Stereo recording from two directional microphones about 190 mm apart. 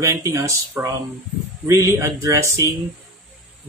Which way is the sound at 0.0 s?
15° right (ahead or behind).